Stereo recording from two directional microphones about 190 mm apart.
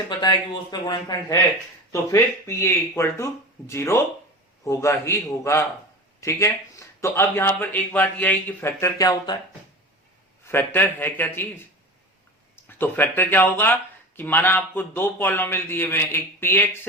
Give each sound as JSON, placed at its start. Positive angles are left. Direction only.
{"t": 0.2, "sound": "speech", "side_deg": 20}
{"t": 10.4, "sound": "speech", "side_deg": 10}
{"t": 12.6, "sound": "speech", "side_deg": 10}